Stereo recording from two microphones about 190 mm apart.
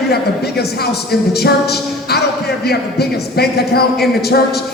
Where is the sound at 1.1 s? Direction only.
55° left (ahead or behind).